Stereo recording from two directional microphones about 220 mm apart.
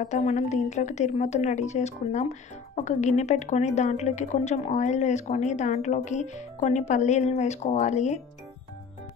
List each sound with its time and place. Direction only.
0.0 s speech: 35° left (ahead or behind)